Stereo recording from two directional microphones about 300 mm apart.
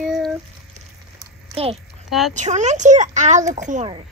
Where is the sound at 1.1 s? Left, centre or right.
Centre.